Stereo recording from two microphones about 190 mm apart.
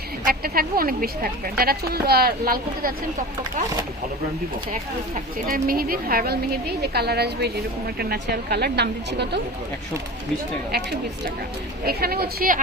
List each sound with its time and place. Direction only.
0.3 s speech: 50° right (ahead or behind)
4.7 s a woman's voice: 45° right (ahead or behind); by 9.4 s 60° right (ahead or behind)
11.9 s speech: 55° right (ahead or behind)